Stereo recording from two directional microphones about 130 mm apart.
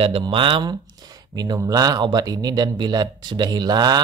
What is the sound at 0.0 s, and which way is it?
Speech, 45° right (ahead or behind).